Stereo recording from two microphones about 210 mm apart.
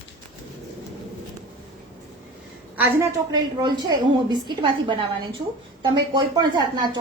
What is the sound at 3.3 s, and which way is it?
A woman's voice, 20° right (ahead or behind).